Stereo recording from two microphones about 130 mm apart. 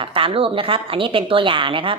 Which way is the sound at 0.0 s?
40° right (ahead or behind).